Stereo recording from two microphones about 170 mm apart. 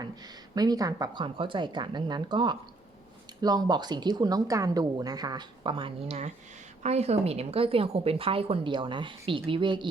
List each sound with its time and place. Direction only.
0.0 s a woman's voice: 25° right (ahead or behind)